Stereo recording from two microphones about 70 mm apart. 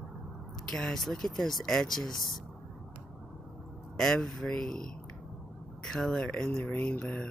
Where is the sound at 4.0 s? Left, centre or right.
Centre.